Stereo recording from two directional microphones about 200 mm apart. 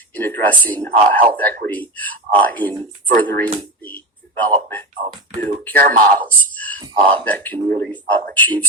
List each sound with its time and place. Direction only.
0.1 s a man's voice: 10° left (ahead or behind)
6.8 s a man's voice: 25° right (ahead or behind)
7.3 s a man's voice: 10° left (ahead or behind)